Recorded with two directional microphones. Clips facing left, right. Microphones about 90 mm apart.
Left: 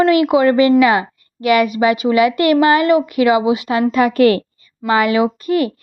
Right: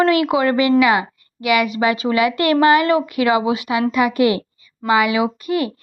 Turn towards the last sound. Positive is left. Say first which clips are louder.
# left 4 dB
turn(degrees=-20)  # may be behind; listen again after turning